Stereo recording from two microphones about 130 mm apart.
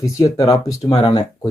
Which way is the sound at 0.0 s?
25° left (ahead or behind).